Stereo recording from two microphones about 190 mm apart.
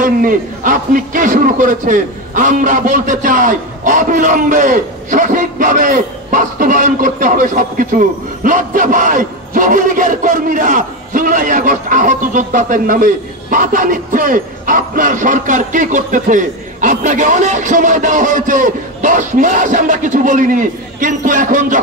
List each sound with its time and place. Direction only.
0.0 s a man's voice: 45° right (ahead or behind)